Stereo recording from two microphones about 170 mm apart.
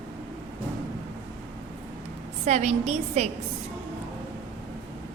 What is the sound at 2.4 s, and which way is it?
Speech, 40° right (ahead or behind).